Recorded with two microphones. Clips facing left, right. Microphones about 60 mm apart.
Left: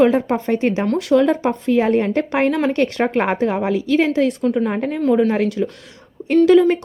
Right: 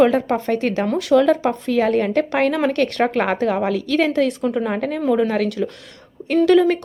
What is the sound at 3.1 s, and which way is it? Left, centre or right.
A woman's voice, centre.